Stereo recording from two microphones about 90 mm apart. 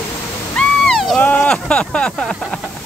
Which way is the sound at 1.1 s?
20° left (ahead or behind).